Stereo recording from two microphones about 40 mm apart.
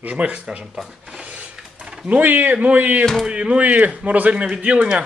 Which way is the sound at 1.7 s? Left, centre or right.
Centre.